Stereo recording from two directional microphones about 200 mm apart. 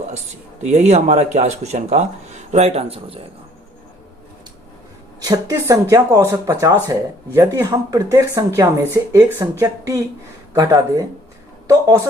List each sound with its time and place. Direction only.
0.6 s speech: 35° right (ahead or behind)
5.2 s speech: 15° right (ahead or behind)